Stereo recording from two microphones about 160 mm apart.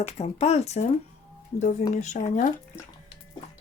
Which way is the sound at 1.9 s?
50° left (ahead or behind).